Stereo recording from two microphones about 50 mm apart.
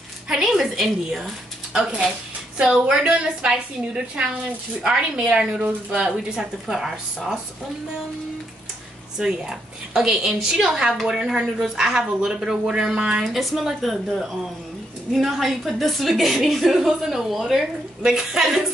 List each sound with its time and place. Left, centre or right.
0.3 s a sound: centre
0.7 s a woman's voice: centre
1.7 s a woman's voice: centre
9.2 s speech: centre
13.2 s a woman's voice: centre